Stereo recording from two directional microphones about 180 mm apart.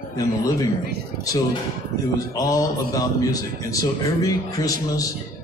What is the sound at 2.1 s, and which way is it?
A man's voice, 20° left (ahead or behind).